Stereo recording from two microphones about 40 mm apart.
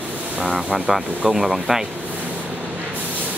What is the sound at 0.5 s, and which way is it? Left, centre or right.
Speech, centre.